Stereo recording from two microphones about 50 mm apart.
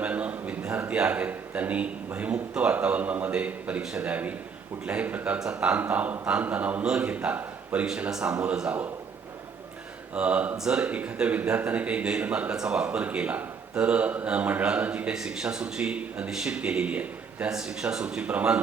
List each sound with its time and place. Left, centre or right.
0.0 s a sound: right
0.9 s a man's voice: right
10.2 s speech: right
15.1 s speech: centre
16.3 s speech: centre
16.6 s speech: right
17.5 s speech: centre
18.2 s speech: right